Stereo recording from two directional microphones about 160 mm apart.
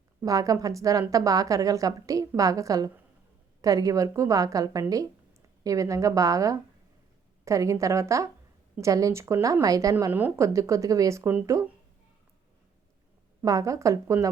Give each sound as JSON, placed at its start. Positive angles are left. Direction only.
{"t": 0.2, "sound": "a woman's voice", "side_deg": -20}
{"t": 13.4, "sound": "a woman's voice", "side_deg": -20}